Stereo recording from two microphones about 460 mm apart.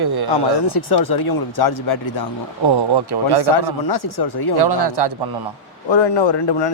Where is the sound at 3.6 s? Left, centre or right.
Left.